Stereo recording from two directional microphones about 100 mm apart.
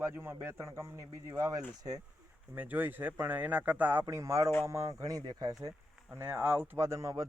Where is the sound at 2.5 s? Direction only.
20° right (ahead or behind); by 5.7 s 40° right (ahead or behind).